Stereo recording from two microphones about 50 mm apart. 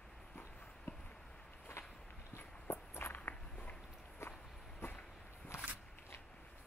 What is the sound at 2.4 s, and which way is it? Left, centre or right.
Walk, left.